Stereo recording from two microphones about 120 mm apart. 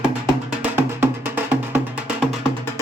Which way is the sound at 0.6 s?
20° right (ahead or behind).